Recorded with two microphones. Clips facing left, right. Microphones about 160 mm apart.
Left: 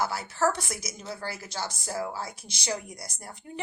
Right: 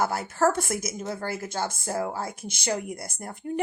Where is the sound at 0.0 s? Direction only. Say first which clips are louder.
Right 3 dB; 50° right (ahead or behind).